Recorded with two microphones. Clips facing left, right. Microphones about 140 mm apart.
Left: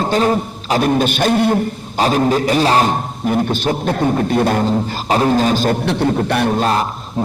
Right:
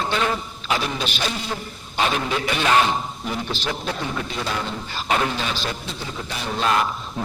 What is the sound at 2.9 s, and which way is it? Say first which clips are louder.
A man's voice: left 9 dB; 50° left (ahead or behind).